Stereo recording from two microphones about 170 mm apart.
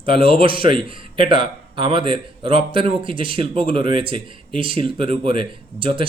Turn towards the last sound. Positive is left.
turn(degrees=-30)  # may be behind; listen again after turning